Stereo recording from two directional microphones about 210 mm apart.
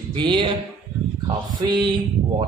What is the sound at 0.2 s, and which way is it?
A man's voice, 20° right (ahead or behind).